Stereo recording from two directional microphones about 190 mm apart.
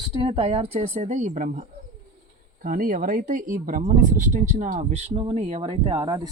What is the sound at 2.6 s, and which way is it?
Speech, 45° right (ahead or behind).